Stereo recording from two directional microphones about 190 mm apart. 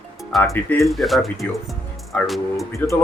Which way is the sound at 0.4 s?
10° left (ahead or behind).